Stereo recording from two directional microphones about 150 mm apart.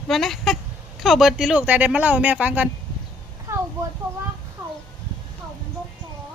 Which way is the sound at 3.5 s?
15° right (ahead or behind).